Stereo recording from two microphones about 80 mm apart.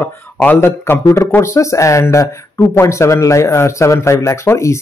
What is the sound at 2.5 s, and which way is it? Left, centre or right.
A man's voice, left.